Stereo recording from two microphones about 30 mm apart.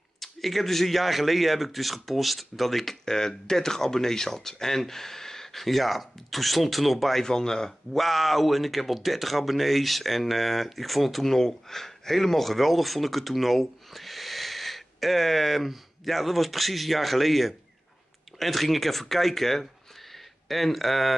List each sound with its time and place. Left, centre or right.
0.2 s a man's voice: centre
7.2 s speech: left
7.9 s speech: centre